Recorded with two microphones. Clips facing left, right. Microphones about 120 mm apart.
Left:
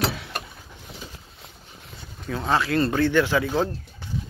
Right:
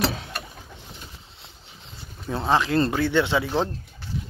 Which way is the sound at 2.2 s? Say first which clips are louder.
Right 1 dB; 20° right (ahead or behind).